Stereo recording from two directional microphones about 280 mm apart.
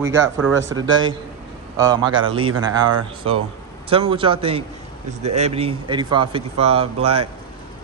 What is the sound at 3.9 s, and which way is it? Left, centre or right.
Speech, centre.